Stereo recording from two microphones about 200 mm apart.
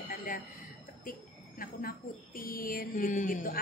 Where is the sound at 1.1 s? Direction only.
45° left (ahead or behind).